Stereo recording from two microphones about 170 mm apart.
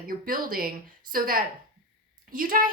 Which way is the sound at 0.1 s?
55° right (ahead or behind).